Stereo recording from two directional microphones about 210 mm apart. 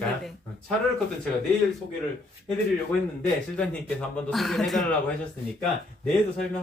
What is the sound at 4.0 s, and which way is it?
Speech, 5° left (ahead or behind).